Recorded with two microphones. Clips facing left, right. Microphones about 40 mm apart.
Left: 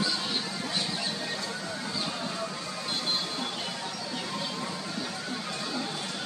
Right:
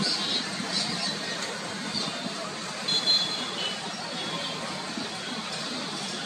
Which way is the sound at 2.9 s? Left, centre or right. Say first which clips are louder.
Right 5 dB; right.